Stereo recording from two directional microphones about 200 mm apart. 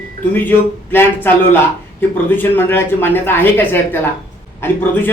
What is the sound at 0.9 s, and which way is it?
Speech, 10° left (ahead or behind).